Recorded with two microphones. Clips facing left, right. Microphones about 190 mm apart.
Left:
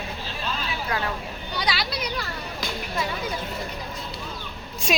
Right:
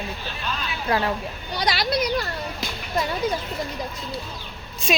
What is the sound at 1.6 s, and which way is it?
Speech, 45° right (ahead or behind).